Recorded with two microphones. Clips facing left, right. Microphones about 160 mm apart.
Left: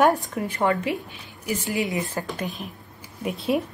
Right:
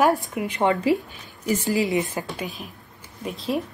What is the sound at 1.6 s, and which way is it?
Speech, 35° right (ahead or behind).